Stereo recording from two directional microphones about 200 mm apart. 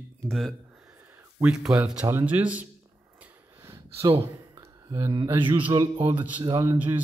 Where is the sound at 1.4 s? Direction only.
5° right (ahead or behind).